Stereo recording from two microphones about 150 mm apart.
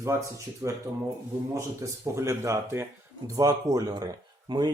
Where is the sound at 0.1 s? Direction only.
20° right (ahead or behind).